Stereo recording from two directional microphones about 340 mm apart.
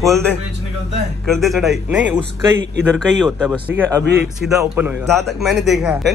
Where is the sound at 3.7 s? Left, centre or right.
Right.